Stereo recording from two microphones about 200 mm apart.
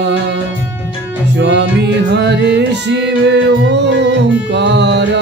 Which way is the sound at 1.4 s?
60° right (ahead or behind).